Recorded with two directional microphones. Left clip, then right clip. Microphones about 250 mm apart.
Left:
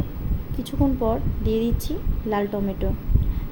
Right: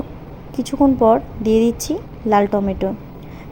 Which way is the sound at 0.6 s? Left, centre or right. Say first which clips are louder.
Right 9 dB; right.